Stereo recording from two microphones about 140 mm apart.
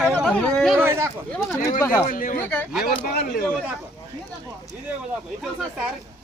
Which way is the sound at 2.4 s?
15° left (ahead or behind).